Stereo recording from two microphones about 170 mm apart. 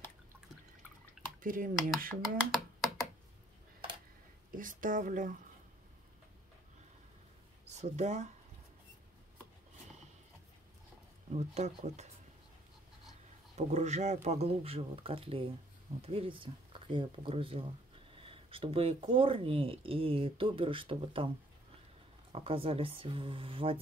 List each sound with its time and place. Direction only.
1.4 s speech: 55° right (ahead or behind)
2.0 s speech: centre (ahead or behind)
4.5 s speech: 55° right (ahead or behind)
7.6 s speech: 45° right (ahead or behind)
11.3 s speech: 40° right (ahead or behind)
13.6 s speech: 40° right (ahead or behind)
22.3 s speech: 35° right (ahead or behind)